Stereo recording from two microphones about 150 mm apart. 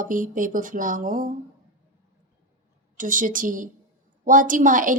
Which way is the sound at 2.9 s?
60° right (ahead or behind).